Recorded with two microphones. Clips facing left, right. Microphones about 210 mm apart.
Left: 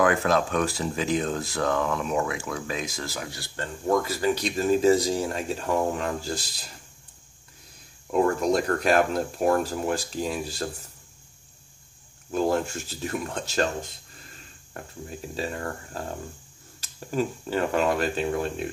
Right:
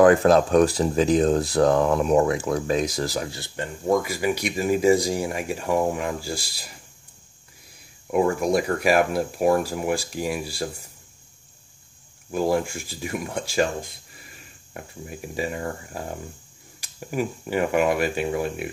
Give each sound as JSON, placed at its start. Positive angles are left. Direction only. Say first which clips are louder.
{"t": 0.0, "sound": "speech", "louder": "right 7 dB", "side_deg": -35}
{"t": 3.3, "sound": "speech", "louder": "right 3 dB", "side_deg": -20}
{"t": 8.1, "sound": "speech", "louder": "right 1 dB", "side_deg": -10}
{"t": 12.3, "sound": "speech", "louder": "right 2 dB", "side_deg": -10}